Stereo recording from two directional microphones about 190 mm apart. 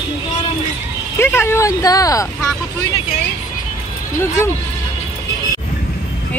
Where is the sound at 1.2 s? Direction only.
15° left (ahead or behind).